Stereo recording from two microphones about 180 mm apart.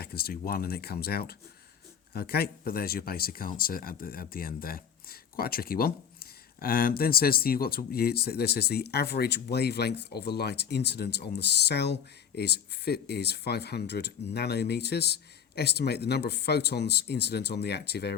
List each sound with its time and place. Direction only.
0.0 s speech: 60° left (ahead or behind)